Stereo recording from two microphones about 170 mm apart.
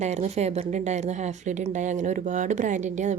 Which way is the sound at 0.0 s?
40° right (ahead or behind).